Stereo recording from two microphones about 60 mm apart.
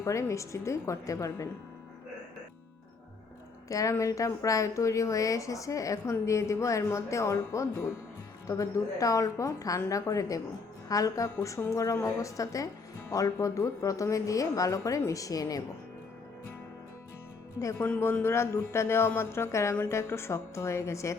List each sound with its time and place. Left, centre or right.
0.0 s speech: left
3.7 s speech: left
17.6 s speech: left
18.0 s a man's voice: left